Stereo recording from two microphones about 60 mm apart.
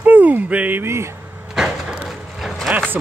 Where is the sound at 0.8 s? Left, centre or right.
Right.